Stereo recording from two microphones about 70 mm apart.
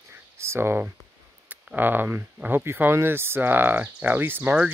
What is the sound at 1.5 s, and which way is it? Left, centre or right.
Speech, right.